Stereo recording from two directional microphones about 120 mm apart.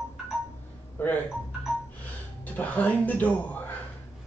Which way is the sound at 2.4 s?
15° left (ahead or behind).